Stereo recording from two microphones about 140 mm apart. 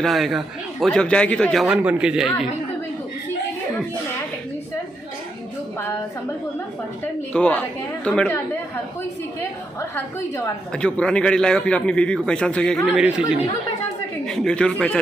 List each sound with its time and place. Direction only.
0.0 s a man's voice: centre (ahead or behind)
7.3 s a man's voice: 10° left (ahead or behind)
9.4 s a man's voice: 15° left (ahead or behind)
10.7 s a man's voice: 5° left (ahead or behind)
12.9 s a man's voice: 5° right (ahead or behind)